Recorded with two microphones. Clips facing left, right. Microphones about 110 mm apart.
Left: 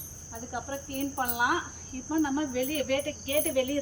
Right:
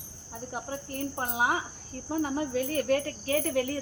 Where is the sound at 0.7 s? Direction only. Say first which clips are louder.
Left 4 dB; 30° right (ahead or behind).